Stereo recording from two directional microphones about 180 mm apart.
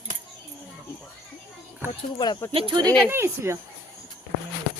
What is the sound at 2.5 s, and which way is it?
Speech, 30° right (ahead or behind).